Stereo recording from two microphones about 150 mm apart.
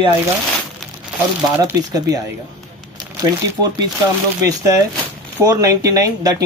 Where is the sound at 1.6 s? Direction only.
25° right (ahead or behind).